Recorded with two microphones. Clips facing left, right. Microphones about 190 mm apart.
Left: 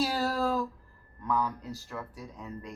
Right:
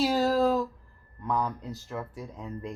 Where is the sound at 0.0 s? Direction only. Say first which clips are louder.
Right 5 dB; 20° right (ahead or behind).